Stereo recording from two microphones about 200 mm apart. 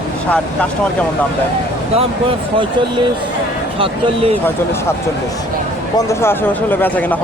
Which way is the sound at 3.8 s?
30° right (ahead or behind).